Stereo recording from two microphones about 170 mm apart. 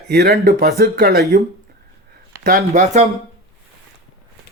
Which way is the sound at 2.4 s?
60° right (ahead or behind).